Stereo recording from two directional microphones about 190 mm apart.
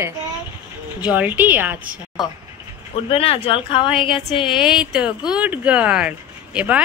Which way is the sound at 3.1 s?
30° left (ahead or behind).